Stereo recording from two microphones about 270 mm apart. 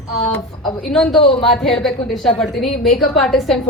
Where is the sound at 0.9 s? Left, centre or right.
Centre.